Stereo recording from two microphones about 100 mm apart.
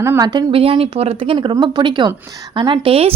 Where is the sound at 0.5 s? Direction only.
70° right (ahead or behind).